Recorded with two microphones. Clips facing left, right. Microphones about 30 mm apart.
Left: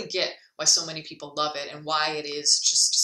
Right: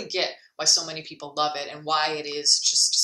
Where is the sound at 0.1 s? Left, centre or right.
Centre.